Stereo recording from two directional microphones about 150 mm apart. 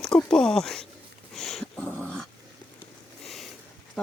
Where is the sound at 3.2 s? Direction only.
Centre (ahead or behind).